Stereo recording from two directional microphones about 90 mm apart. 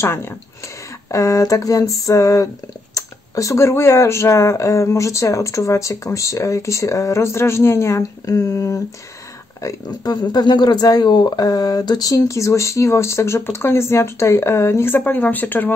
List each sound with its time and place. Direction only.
0.0 s speech: 30° left (ahead or behind)
9.8 s speech: 50° left (ahead or behind); by 15.7 s 20° left (ahead or behind)